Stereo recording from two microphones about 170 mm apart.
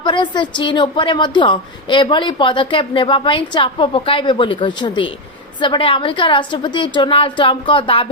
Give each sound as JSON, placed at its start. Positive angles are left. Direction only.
{"t": 0.0, "sound": "a woman's voice", "side_deg": 25}